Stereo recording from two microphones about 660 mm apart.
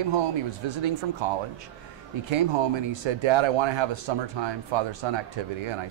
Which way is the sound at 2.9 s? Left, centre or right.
Right.